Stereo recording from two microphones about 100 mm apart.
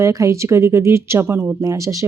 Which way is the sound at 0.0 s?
30° right (ahead or behind).